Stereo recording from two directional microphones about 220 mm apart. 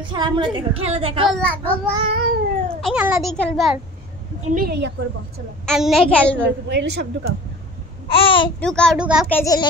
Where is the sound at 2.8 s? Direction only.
Centre (ahead or behind).